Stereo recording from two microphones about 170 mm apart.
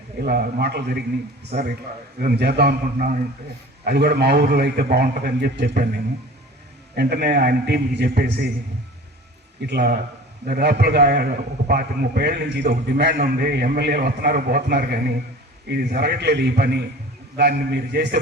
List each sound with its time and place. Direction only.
0.2 s a man's voice: 70° right (ahead or behind)
9.6 s a man's voice: 75° right (ahead or behind)